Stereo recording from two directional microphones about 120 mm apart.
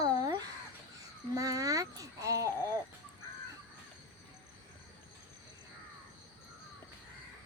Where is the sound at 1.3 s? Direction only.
30° right (ahead or behind).